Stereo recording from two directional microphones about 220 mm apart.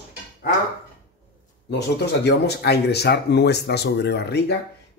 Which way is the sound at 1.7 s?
50° left (ahead or behind).